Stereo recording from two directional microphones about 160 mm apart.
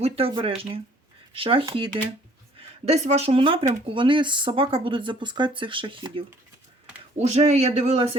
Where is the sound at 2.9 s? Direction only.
45° right (ahead or behind).